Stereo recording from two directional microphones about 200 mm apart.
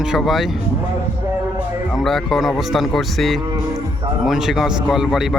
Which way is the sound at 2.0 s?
Centre (ahead or behind).